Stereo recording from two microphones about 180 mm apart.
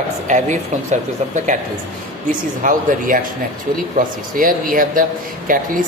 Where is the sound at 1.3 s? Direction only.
45° right (ahead or behind).